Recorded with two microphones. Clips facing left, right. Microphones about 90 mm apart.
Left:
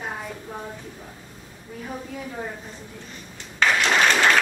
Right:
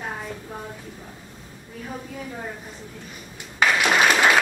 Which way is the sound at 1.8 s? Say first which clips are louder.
Left 1 dB; centre (ahead or behind).